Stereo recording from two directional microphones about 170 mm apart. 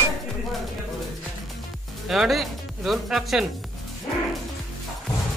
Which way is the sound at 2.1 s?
Centre (ahead or behind).